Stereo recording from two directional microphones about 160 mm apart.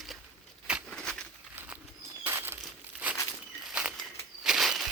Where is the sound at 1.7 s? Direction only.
15° right (ahead or behind).